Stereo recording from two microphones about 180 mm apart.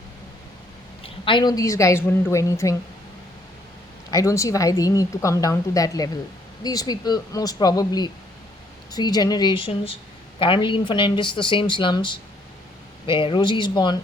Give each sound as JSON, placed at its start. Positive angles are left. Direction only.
{"t": 1.0, "sound": "a woman's voice", "side_deg": 30}
{"t": 4.1, "sound": "a woman's voice", "side_deg": 20}